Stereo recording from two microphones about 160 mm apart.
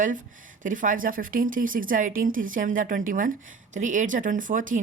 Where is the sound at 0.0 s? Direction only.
55° right (ahead or behind).